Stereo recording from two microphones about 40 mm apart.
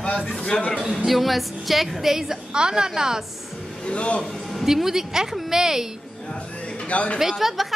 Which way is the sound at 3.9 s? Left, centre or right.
Left.